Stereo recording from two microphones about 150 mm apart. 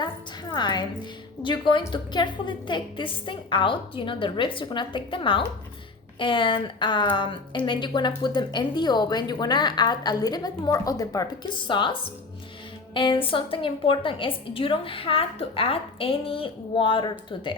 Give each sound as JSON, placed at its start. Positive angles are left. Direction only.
{"t": 0.0, "sound": "a woman's voice", "side_deg": 30}